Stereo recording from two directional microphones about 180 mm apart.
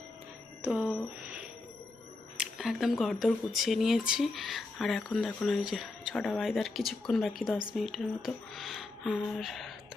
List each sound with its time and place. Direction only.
0.6 s speech: 5° right (ahead or behind)